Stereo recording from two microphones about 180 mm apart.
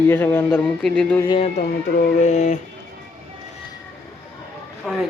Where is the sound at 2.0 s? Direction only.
40° left (ahead or behind).